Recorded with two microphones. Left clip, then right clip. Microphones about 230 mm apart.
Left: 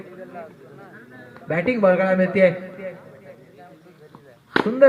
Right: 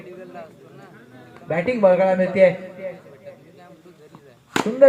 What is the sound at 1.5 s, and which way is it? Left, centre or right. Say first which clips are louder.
A man's voice: right 1 dB; left.